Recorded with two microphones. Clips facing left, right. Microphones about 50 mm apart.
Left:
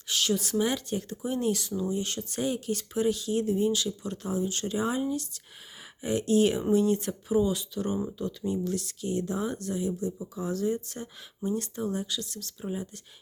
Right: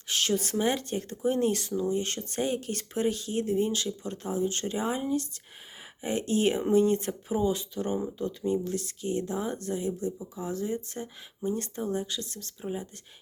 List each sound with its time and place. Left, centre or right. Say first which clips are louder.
0.1 s speech: even; right
12.6 s speech: even; centre